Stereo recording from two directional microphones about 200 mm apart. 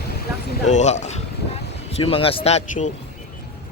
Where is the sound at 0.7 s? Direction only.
35° left (ahead or behind).